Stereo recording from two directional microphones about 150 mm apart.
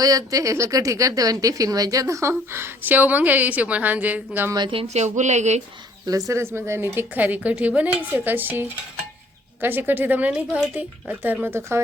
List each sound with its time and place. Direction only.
0.0 s speech: 25° right (ahead or behind)
4.5 s speech: 35° right (ahead or behind); by 5.6 s 50° right (ahead or behind)
6.1 s a woman's voice: 20° right (ahead or behind)